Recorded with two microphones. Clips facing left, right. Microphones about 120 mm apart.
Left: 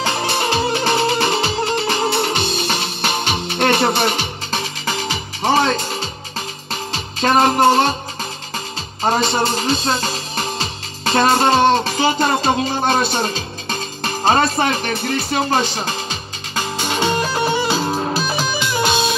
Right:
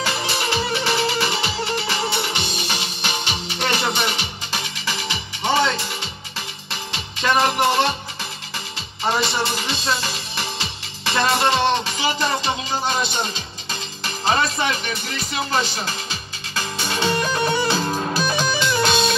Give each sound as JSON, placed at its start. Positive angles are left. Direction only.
{"t": 0.3, "sound": "music", "side_deg": 30}
{"t": 2.2, "sound": "music", "side_deg": 45}
{"t": 3.7, "sound": "music", "side_deg": 40}
{"t": 9.5, "sound": "speech", "side_deg": 35}
{"t": 13.0, "sound": "music", "side_deg": 45}
{"t": 14.2, "sound": "speech", "side_deg": 35}
{"t": 16.5, "sound": "music", "side_deg": 20}